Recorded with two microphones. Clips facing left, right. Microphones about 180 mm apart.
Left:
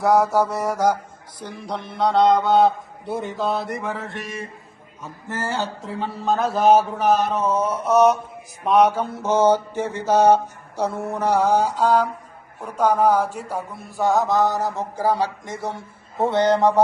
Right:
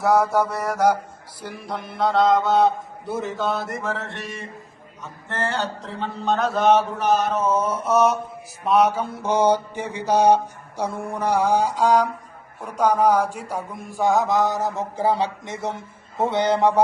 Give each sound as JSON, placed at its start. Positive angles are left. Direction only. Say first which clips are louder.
{"t": 0.5, "sound": "mantra", "louder": "left 2 dB", "side_deg": 10}
{"t": 1.4, "sound": "a man's voice", "louder": "left 1 dB", "side_deg": -5}
{"t": 8.7, "sound": "a sound", "louder": "left 2 dB", "side_deg": -10}